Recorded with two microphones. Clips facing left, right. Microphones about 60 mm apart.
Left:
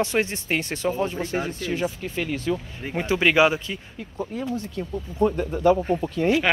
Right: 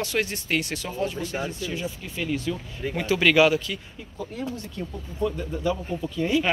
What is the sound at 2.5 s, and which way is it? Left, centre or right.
Speech, left.